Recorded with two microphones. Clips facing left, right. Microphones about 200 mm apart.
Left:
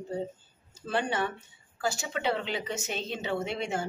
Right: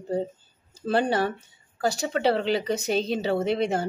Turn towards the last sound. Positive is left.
turn(degrees=-35)  # may be behind; listen again after turning